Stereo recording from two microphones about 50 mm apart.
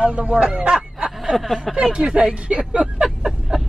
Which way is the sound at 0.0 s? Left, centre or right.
Right.